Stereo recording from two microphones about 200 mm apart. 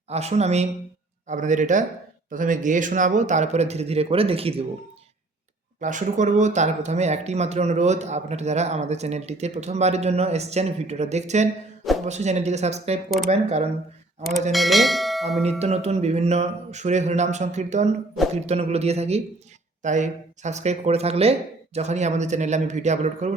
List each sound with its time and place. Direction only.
0.1 s speech: 35° right (ahead or behind)
5.8 s speech: 40° right (ahead or behind)
14.5 s bell: centre (ahead or behind)
15.4 s speech: 30° right (ahead or behind)